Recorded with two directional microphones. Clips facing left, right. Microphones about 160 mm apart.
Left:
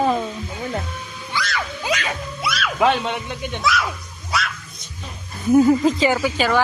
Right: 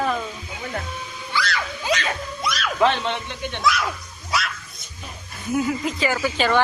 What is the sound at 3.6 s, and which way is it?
Dog, centre (ahead or behind).